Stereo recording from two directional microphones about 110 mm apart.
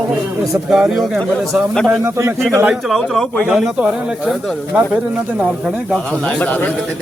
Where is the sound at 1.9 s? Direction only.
25° right (ahead or behind).